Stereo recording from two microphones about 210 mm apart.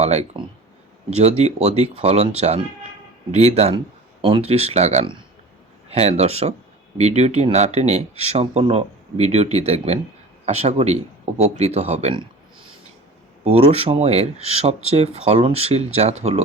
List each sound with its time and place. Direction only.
0.0 s speech: 30° right (ahead or behind)
13.4 s speech: 30° right (ahead or behind)